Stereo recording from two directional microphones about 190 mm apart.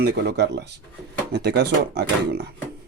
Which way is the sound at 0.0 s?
60° right (ahead or behind).